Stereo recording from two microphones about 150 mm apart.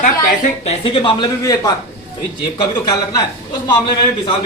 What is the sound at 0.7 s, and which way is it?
A man's voice, 35° left (ahead or behind).